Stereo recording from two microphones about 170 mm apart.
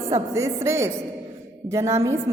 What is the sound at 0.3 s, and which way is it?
A woman's voice, 15° right (ahead or behind).